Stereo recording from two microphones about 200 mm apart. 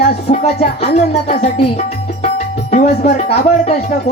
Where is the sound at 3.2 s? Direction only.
35° left (ahead or behind).